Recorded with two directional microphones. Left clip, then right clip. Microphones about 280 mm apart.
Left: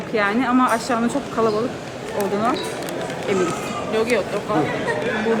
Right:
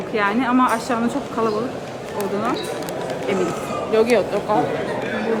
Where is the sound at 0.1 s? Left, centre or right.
Centre.